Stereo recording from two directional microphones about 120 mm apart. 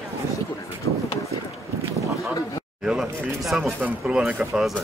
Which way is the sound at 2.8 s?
5° right (ahead or behind).